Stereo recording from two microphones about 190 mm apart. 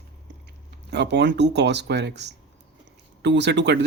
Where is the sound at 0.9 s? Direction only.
65° right (ahead or behind).